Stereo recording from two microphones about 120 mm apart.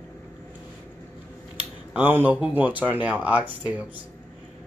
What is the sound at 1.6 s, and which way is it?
Speech, 15° right (ahead or behind).